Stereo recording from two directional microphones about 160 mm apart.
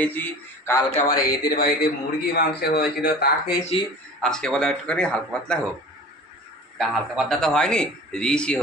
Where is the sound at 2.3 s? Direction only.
90° left.